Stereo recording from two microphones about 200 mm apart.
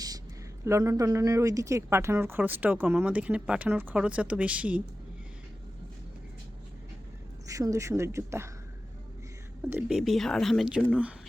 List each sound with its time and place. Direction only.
0.6 s speech: 15° right (ahead or behind)
7.4 s speech: 15° right (ahead or behind)
9.6 s speech: 5° right (ahead or behind)